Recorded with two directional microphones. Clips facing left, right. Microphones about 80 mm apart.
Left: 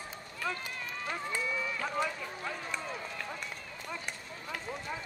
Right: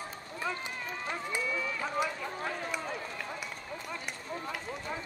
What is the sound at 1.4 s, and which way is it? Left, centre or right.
Run, centre.